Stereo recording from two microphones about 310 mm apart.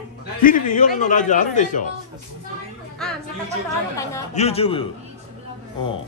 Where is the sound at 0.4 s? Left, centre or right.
Left.